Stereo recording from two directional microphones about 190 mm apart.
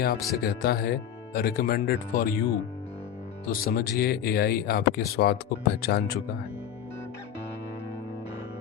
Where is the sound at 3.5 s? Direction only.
50° left (ahead or behind).